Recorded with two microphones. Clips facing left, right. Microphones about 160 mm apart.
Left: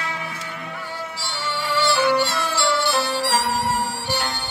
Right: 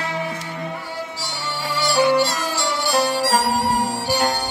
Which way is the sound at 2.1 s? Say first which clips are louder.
Right 2 dB; 40° right (ahead or behind).